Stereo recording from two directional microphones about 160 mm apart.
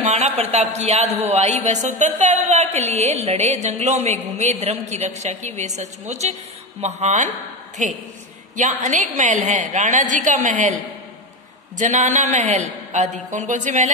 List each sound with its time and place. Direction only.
0.1 s speech: 40° right (ahead or behind)